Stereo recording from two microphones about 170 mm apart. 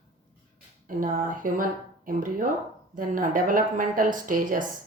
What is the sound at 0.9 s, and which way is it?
Speech, 55° right (ahead or behind).